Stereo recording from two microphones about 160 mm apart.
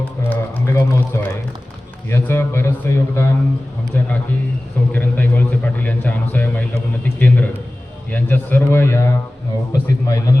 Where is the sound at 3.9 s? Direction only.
10° left (ahead or behind).